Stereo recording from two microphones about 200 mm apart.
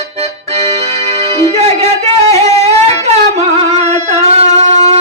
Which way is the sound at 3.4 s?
30° right (ahead or behind).